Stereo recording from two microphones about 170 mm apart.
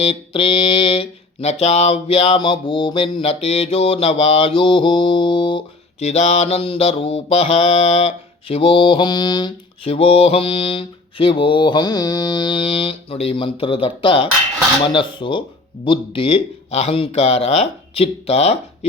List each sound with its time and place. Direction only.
0.0 s mantra: 30° left (ahead or behind)
6.1 s mantra: 40° left (ahead or behind)